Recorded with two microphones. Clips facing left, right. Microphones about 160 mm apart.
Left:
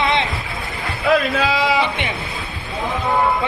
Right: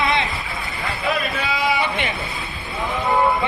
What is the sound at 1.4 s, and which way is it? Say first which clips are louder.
Speech: left 4 dB; 90° left.